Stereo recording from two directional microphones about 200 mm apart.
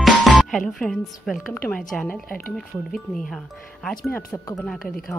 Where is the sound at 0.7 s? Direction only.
Centre (ahead or behind).